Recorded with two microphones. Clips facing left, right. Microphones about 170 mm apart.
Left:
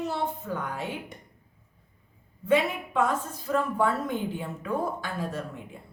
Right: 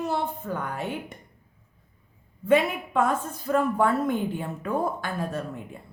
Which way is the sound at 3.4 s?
55° right (ahead or behind).